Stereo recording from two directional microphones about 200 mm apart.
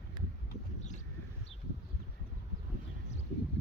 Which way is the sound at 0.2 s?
25° right (ahead or behind).